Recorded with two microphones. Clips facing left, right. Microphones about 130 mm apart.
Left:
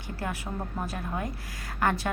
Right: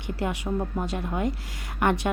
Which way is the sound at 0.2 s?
20° right (ahead or behind).